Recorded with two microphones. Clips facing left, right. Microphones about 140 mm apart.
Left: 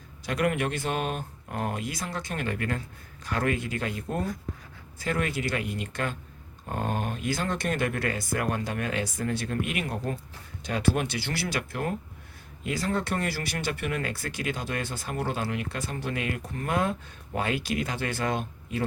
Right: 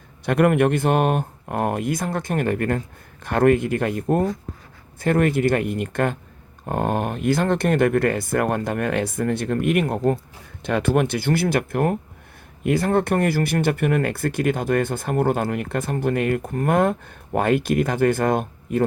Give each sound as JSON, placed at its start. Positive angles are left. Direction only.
{"t": 0.3, "sound": "speech", "side_deg": -55}